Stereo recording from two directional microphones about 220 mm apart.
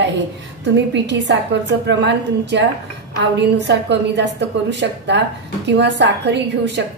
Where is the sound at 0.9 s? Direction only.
55° right (ahead or behind).